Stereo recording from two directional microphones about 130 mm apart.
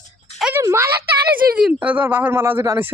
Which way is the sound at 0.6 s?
20° right (ahead or behind).